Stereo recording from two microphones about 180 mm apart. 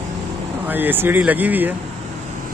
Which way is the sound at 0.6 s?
10° right (ahead or behind).